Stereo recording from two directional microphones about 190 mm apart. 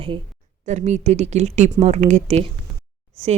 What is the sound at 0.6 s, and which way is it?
Speech, 40° right (ahead or behind).